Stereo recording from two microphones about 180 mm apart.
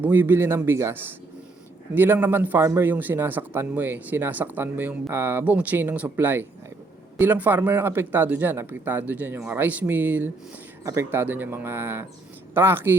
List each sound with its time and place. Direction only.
0.0 s a man's voice: 10° right (ahead or behind)
2.0 s a man's voice: 10° right (ahead or behind)